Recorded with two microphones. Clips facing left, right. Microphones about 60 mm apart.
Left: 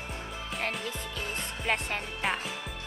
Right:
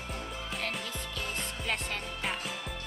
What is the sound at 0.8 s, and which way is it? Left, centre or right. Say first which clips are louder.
Speech: left 2 dB; left.